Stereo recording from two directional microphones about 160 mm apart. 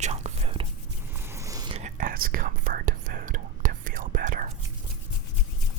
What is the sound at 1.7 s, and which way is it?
Whispering, 55° right (ahead or behind).